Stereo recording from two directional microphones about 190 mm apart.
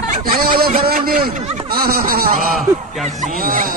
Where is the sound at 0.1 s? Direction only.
50° right (ahead or behind).